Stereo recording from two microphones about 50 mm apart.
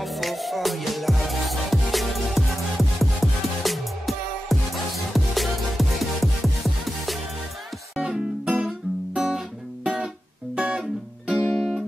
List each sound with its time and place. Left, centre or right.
0.0 s music: centre
8.0 s music: right
8.5 s guitar: centre
10.5 s music: right
10.8 s music: centre